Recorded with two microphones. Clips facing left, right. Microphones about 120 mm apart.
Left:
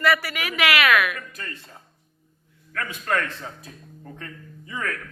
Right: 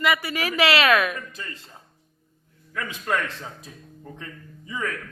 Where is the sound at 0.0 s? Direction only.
20° right (ahead or behind).